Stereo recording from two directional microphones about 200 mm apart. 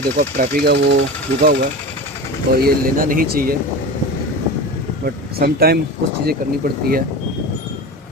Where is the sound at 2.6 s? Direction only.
45° right (ahead or behind).